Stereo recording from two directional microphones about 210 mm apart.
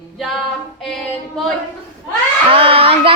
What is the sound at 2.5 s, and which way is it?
Speech, 25° right (ahead or behind).